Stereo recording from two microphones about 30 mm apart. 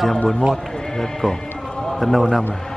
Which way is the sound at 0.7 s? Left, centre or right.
Centre.